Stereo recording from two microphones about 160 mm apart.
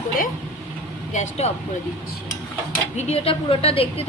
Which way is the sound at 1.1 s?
45° left (ahead or behind).